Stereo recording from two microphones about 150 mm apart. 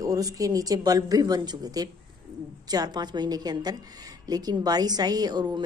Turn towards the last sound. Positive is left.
turn(degrees=-25)  # may be behind; listen again after turning